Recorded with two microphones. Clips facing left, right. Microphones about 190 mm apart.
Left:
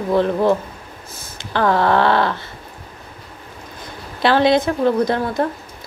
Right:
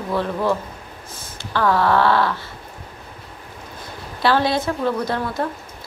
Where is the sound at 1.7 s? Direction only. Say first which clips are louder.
Left 1 dB; 20° left (ahead or behind).